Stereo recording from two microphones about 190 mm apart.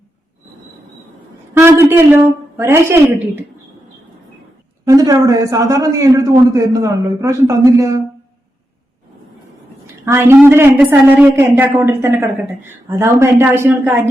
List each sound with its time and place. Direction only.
1.5 s a man's voice: 15° right (ahead or behind)
4.9 s a man's voice: 20° right (ahead or behind)
10.1 s a man's voice: 10° right (ahead or behind)